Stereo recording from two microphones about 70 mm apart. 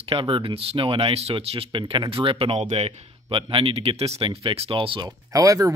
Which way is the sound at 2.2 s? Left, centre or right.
Right.